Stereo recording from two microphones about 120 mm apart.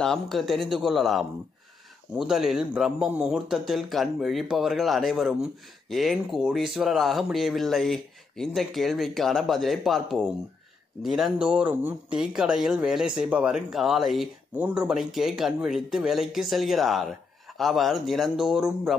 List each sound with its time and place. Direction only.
0.0 s speech: centre (ahead or behind)